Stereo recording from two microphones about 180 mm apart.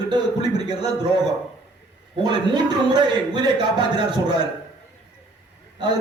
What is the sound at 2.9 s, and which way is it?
A man's voice, 25° right (ahead or behind).